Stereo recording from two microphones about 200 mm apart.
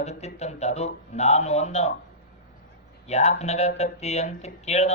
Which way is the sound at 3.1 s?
35° left (ahead or behind).